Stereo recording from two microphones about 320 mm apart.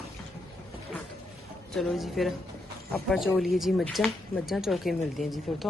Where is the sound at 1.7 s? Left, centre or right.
Centre.